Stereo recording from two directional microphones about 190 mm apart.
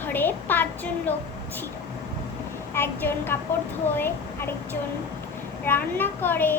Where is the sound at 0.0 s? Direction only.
10° left (ahead or behind).